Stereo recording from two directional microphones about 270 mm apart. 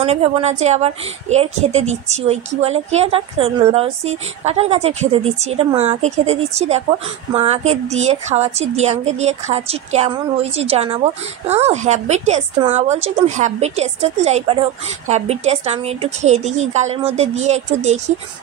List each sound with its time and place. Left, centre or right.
0.0 s a woman's voice: right